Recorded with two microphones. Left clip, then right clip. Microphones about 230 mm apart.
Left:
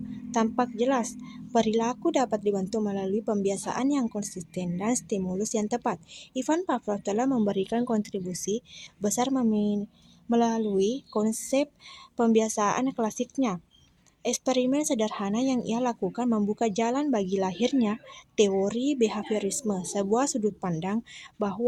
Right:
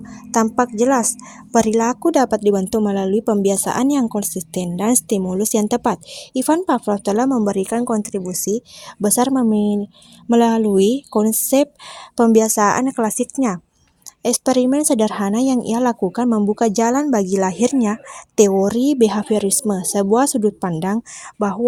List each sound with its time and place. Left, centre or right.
0.1 s a woman's voice: right
21.3 s speech: right